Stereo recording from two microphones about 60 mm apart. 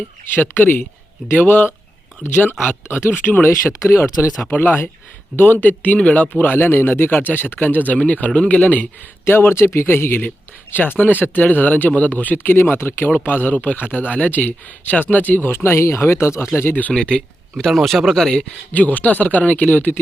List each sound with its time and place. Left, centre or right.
0.5 s a man's voice: left
3.5 s speech: left
5.4 s a man's voice: left
6.0 s speech: centre
6.3 s a man's voice: left
9.2 s a man's voice: left
15.5 s speech: left
16.9 s speech: centre
17.6 s speech: centre
18.7 s a man's voice: left